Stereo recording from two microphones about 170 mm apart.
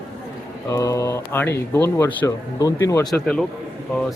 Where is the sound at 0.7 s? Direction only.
20° left (ahead or behind).